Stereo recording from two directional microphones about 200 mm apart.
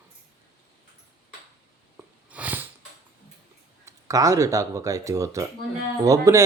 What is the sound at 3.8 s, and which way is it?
Speech, 15° right (ahead or behind).